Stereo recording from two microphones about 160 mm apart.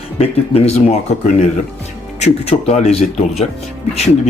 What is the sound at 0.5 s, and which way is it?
Speech, 40° left (ahead or behind).